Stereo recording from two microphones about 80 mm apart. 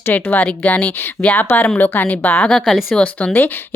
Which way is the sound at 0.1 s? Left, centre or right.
Left.